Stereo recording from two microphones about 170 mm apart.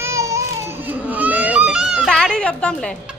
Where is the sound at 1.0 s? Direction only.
10° right (ahead or behind); by 2.8 s 5° left (ahead or behind).